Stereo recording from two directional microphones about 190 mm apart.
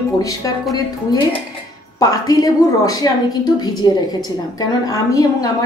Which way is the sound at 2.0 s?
20° left (ahead or behind).